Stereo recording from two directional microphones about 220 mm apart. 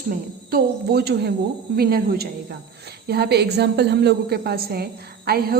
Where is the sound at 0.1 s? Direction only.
45° right (ahead or behind).